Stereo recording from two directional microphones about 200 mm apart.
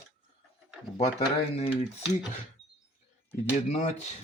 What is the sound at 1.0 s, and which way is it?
Speech, 30° left (ahead or behind).